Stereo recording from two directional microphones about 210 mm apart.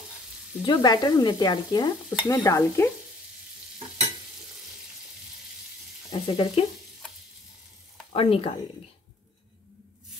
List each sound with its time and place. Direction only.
0.7 s stir: 20° left (ahead or behind)
6.1 s stir: 20° left (ahead or behind)
8.1 s stir: 25° left (ahead or behind)